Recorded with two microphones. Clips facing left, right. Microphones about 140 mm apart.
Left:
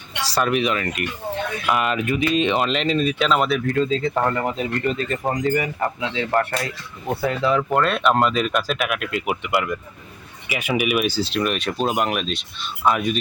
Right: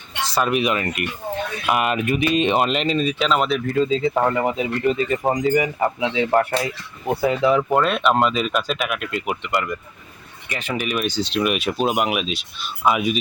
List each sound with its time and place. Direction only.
0.3 s speech: 5° right (ahead or behind)
2.6 s speech: 5° right (ahead or behind)